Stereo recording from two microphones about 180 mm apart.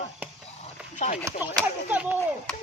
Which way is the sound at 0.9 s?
40° left (ahead or behind).